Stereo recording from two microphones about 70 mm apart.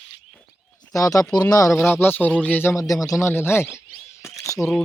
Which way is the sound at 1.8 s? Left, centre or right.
Left.